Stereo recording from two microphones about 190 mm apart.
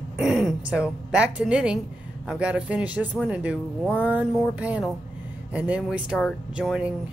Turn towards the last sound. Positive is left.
turn(degrees=-5)  # may be behind; listen again after turning